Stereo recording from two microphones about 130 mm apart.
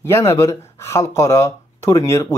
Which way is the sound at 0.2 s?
25° left (ahead or behind).